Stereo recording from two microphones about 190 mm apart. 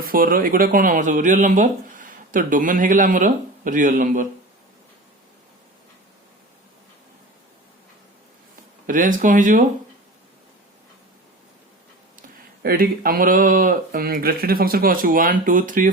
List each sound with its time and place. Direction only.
0.1 s speech: 50° right (ahead or behind)
8.9 s speech: 45° right (ahead or behind)
12.6 s speech: 50° right (ahead or behind)